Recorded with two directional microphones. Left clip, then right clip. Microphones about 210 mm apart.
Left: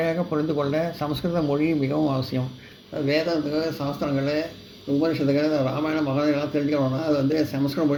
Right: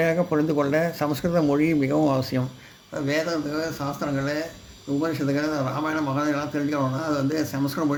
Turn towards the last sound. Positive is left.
turn(degrees=-30)  # may be behind; listen again after turning